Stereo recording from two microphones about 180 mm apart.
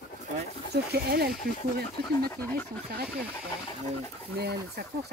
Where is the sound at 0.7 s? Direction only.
65° right (ahead or behind).